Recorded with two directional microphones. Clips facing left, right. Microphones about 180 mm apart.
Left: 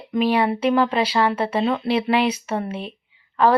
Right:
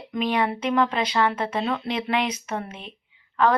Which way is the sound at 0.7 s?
30° left (ahead or behind).